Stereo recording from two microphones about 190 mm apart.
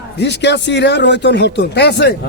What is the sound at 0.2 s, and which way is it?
Speech, 65° left (ahead or behind).